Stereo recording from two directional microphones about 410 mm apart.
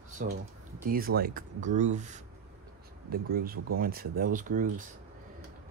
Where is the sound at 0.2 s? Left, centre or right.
Centre.